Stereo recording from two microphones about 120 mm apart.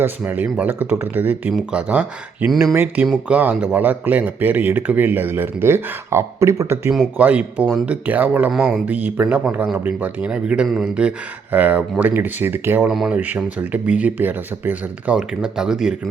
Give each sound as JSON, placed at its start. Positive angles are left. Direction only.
{"t": 0.0, "sound": "speech", "side_deg": -15}
{"t": 12.9, "sound": "speech", "side_deg": -5}
{"t": 13.1, "sound": "speech", "side_deg": -15}